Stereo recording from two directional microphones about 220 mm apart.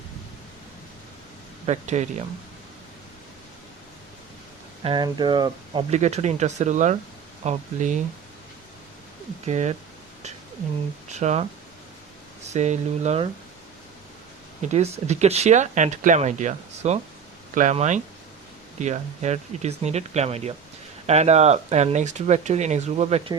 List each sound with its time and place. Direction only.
1.6 s speech: 30° right (ahead or behind)
4.8 s speech: 20° right (ahead or behind)
9.5 s speech: 30° right (ahead or behind)
11.1 s speech: 30° right (ahead or behind)
14.6 s speech: 30° right (ahead or behind)